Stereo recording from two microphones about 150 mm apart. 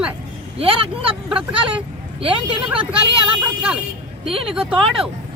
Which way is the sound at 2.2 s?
35° right (ahead or behind).